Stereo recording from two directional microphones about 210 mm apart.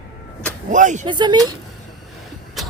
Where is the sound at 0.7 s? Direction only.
35° right (ahead or behind).